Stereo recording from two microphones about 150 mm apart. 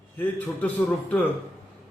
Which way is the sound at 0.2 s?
10° left (ahead or behind).